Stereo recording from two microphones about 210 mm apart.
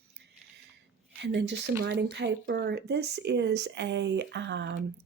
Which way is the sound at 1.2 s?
55° right (ahead or behind).